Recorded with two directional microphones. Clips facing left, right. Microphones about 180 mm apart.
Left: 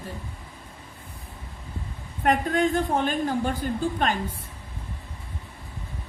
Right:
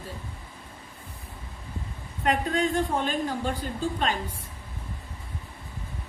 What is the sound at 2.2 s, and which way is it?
A woman's voice, 50° left (ahead or behind).